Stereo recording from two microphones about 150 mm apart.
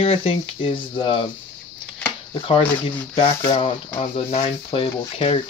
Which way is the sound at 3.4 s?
40° left (ahead or behind).